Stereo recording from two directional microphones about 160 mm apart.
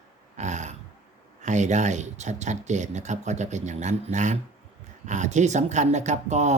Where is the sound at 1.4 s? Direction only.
50° right (ahead or behind).